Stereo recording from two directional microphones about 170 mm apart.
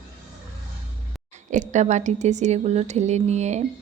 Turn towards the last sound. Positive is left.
turn(degrees=-40)  # may be behind; listen again after turning